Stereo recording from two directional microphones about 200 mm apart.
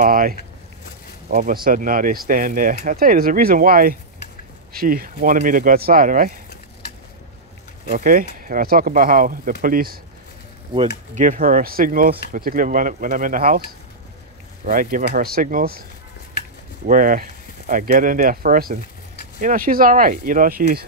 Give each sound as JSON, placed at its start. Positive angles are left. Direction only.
{"t": 0.0, "sound": "speech", "side_deg": -45}
{"t": 7.9, "sound": "speech", "side_deg": -45}
{"t": 11.1, "sound": "speech", "side_deg": -45}
{"t": 16.8, "sound": "speech", "side_deg": -45}